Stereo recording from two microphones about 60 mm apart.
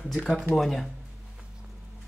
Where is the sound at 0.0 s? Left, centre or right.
Centre.